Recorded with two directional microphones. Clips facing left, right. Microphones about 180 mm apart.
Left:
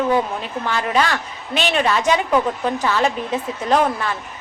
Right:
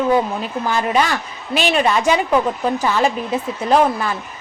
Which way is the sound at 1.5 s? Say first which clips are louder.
Right 2 dB; 5° right (ahead or behind).